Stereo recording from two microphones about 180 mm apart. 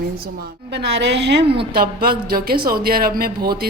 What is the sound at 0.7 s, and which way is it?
Speech, 70° right (ahead or behind).